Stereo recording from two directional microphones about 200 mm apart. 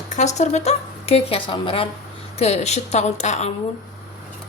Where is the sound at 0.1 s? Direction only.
35° left (ahead or behind).